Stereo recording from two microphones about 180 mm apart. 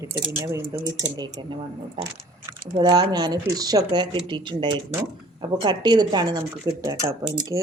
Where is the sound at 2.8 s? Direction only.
25° right (ahead or behind).